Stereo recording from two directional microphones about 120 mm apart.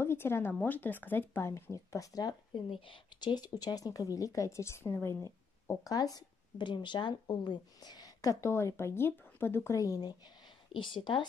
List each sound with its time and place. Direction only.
0.0 s speech: 20° left (ahead or behind)
2.7 s speech: 45° left (ahead or behind)
10.7 s speech: 45° left (ahead or behind)